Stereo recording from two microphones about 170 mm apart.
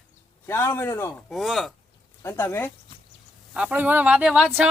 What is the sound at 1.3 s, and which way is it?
Speech, centre (ahead or behind).